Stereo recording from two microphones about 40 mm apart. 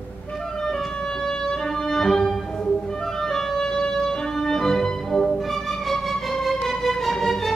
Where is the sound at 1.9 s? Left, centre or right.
Centre.